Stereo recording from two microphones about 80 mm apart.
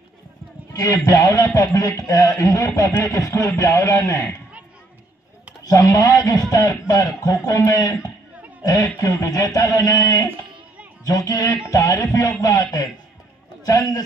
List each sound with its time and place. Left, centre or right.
0.7 s a man's voice: left
5.6 s a man's voice: left